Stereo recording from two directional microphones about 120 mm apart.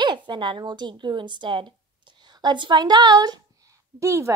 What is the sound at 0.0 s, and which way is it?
A woman's voice, 40° right (ahead or behind).